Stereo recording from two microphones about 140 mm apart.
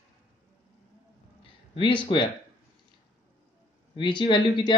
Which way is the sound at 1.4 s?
40° left (ahead or behind).